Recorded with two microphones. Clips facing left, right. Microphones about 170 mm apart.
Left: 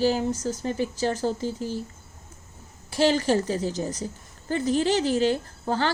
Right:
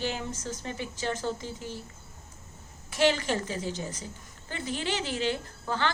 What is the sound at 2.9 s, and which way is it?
Speech, 35° left (ahead or behind).